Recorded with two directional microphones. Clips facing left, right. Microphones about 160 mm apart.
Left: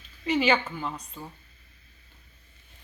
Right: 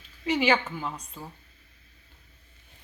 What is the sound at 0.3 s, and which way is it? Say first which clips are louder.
A woman's voice: even; 10° right (ahead or behind).